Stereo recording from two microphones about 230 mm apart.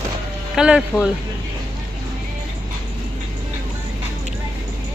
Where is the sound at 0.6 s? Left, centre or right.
Centre.